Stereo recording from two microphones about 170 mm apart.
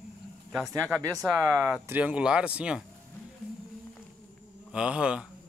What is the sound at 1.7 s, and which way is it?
Speech, 10° right (ahead or behind).